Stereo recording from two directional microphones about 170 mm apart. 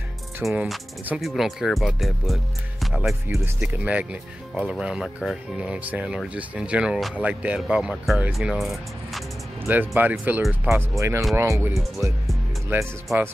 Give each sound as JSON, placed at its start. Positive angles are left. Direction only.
{"t": 0.4, "sound": "speech", "side_deg": -15}
{"t": 0.7, "sound": "speech", "side_deg": -5}